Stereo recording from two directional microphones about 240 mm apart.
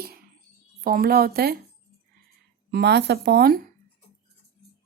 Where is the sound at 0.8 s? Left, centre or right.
Right.